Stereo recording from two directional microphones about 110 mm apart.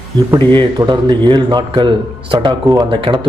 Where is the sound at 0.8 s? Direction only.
45° right (ahead or behind).